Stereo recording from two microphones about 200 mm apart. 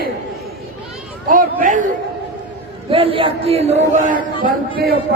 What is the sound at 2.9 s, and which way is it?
A man's voice, 25° right (ahead or behind).